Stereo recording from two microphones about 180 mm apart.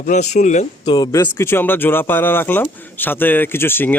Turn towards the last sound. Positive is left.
turn(degrees=10)  # may be behind; listen again after turning